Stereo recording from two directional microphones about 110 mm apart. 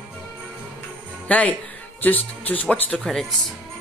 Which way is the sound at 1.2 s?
15° left (ahead or behind).